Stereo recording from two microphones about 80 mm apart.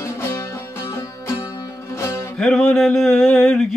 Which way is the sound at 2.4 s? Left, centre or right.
Centre.